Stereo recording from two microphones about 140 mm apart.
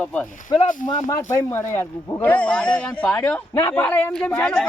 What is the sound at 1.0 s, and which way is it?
Speech, 20° left (ahead or behind).